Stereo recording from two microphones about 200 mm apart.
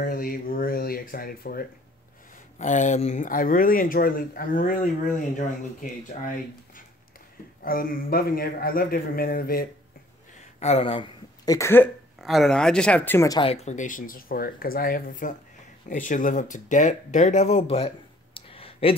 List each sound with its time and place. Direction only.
0.0 s speech: 45° left (ahead or behind)
2.6 s speech: 40° left (ahead or behind)
10.6 s speech: 30° left (ahead or behind); by 11.9 s 10° left (ahead or behind)
12.2 s speech: centre (ahead or behind)
13.4 s speech: 30° left (ahead or behind)